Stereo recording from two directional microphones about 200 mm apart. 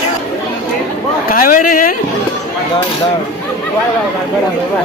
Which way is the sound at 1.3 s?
40° left (ahead or behind).